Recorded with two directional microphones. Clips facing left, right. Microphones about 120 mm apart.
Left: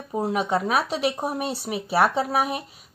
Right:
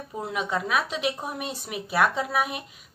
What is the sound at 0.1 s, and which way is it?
A woman's voice, 40° left (ahead or behind).